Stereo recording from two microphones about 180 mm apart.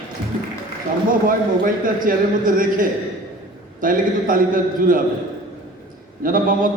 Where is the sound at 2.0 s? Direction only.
50° right (ahead or behind).